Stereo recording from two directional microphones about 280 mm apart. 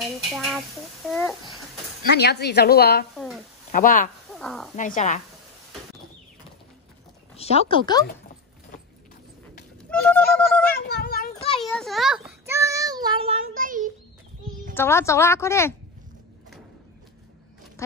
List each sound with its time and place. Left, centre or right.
0.0 s a child's voice: centre
2.1 s a woman's voice: left
4.3 s speech: centre
4.7 s speech: left
7.3 s speech: left
9.8 s a sound: centre
10.8 s a sound: left
11.3 s a sound: centre
11.6 s child singing: centre
13.5 s child singing: right
14.7 s a woman's voice: centre
17.8 s a sound: centre